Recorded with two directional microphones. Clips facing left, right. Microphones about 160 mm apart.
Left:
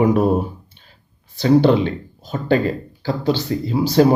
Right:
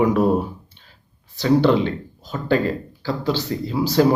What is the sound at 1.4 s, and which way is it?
Speech, 20° left (ahead or behind).